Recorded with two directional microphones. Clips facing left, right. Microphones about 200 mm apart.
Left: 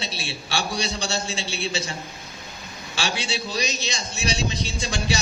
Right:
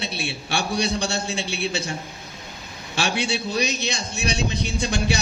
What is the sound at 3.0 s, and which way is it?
A man's voice, 60° right (ahead or behind).